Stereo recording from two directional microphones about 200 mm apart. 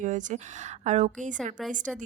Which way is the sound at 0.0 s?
40° right (ahead or behind).